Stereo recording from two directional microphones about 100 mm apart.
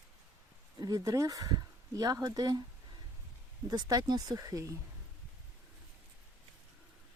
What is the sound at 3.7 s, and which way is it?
Speech, 40° right (ahead or behind).